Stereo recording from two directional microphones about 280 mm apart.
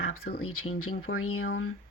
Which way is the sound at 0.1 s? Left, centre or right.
Left.